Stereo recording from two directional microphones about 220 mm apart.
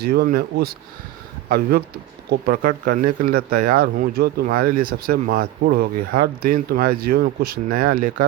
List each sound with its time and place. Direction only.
0.0 s speech: 45° right (ahead or behind)